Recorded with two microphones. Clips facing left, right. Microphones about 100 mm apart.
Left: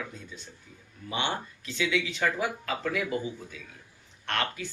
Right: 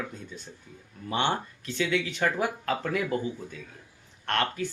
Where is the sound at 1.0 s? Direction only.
45° right (ahead or behind).